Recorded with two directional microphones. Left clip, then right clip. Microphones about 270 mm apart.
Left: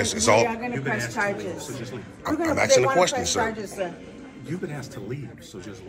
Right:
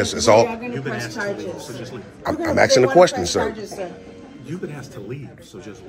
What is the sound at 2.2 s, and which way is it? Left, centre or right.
A man's voice, right.